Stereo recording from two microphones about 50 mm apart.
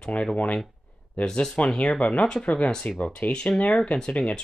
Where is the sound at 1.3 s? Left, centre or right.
Centre.